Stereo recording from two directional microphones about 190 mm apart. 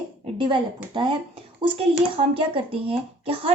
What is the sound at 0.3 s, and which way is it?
Speech, 25° right (ahead or behind).